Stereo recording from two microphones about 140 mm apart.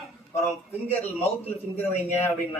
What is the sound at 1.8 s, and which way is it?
Speech, 15° left (ahead or behind).